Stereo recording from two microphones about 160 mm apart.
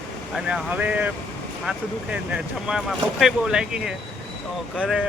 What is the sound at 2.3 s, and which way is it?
Speech, 5° right (ahead or behind).